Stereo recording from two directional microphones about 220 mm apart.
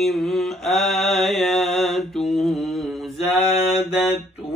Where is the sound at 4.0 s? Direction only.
30° left (ahead or behind).